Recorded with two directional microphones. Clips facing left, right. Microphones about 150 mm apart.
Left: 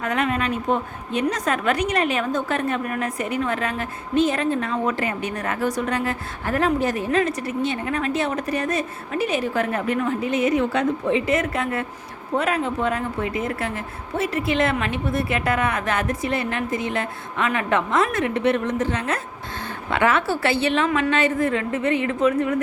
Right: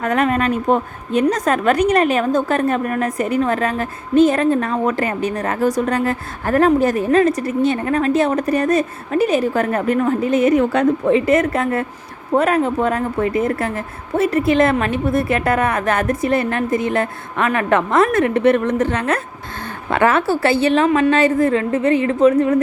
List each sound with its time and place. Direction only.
0.0 s a woman's voice: 45° right (ahead or behind)
19.9 s a woman's voice: 45° right (ahead or behind)